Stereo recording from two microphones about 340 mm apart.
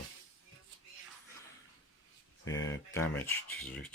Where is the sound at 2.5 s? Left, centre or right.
Left.